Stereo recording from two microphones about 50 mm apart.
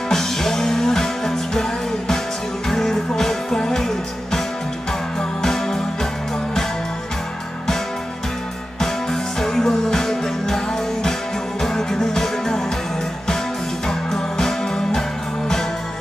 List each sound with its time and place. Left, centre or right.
0.1 s music: centre
5.4 s music: centre
9.4 s music: centre
13.8 s music: centre